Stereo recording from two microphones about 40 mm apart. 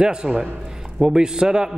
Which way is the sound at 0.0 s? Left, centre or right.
Right.